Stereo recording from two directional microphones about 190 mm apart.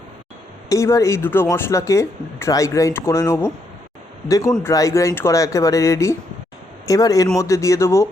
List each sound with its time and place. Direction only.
0.7 s speech: 15° left (ahead or behind)